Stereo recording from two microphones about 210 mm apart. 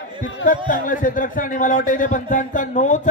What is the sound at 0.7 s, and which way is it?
A man's voice, 40° left (ahead or behind).